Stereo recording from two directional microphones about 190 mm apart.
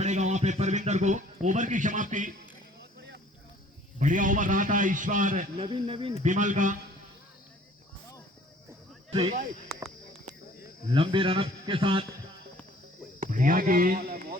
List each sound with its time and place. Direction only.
0.0 s a man's voice: 40° right (ahead or behind)
4.0 s a man's voice: 45° right (ahead or behind)
5.5 s a man's voice: 30° right (ahead or behind)
6.2 s a man's voice: 40° right (ahead or behind)
9.1 s a man's voice: 35° right (ahead or behind)
10.9 s a man's voice: 25° right (ahead or behind)
13.1 s a man's voice: 45° right (ahead or behind)